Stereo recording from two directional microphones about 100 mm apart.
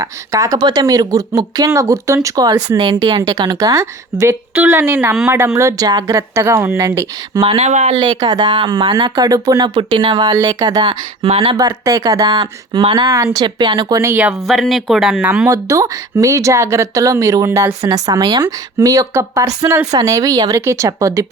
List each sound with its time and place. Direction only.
0.0 s speech: 35° right (ahead or behind)
4.5 s speech: 20° right (ahead or behind)
7.4 s speech: 90° right
7.9 s speech: 45° right (ahead or behind)
11.2 s speech: 80° right
11.5 s speech: 35° right (ahead or behind)
12.8 s speech: 60° right (ahead or behind)
13.1 s speech: 30° right (ahead or behind)
13.4 s speech: 50° right (ahead or behind)
14.4 s speech: centre (ahead or behind)
15.5 s speech: 35° right (ahead or behind)